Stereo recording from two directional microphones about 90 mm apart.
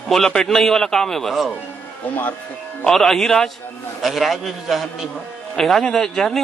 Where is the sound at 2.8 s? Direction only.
5° left (ahead or behind).